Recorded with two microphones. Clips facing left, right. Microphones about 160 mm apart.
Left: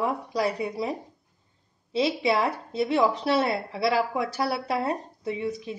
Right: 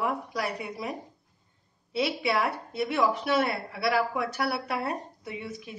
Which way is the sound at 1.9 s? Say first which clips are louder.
Left 3 dB; 25° left (ahead or behind).